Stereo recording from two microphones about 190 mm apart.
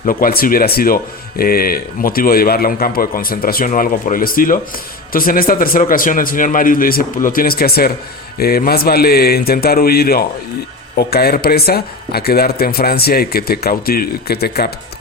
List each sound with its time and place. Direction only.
0.0 s speech: 50° left (ahead or behind)